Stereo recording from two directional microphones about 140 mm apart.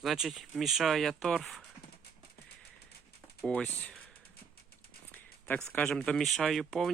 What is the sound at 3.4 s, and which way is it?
Speech, 10° left (ahead or behind).